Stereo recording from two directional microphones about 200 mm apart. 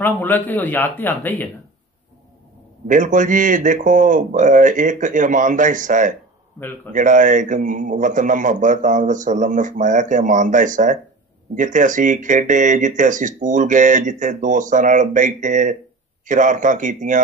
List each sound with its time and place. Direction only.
0.0 s speech: 10° left (ahead or behind)
2.9 s speech: 40° right (ahead or behind)